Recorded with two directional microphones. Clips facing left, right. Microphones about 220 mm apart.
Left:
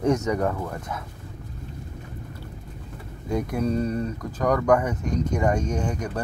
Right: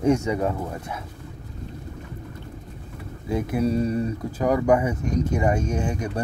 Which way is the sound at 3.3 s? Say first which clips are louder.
Right 2 dB; 5° right (ahead or behind).